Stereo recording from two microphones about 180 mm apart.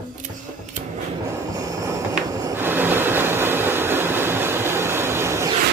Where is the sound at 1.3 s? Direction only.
15° right (ahead or behind).